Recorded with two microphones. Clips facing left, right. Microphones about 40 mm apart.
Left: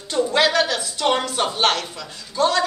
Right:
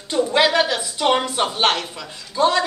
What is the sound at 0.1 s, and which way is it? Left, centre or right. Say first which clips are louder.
A woman's voice: right 1 dB; centre.